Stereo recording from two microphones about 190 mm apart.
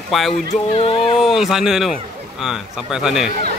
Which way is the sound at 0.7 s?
30° left (ahead or behind).